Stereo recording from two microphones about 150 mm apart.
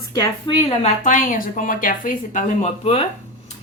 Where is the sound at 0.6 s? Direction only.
50° left (ahead or behind).